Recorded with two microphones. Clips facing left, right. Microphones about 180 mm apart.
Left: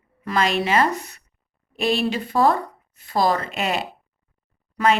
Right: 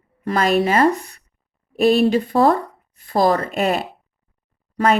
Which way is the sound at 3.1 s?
50° right (ahead or behind).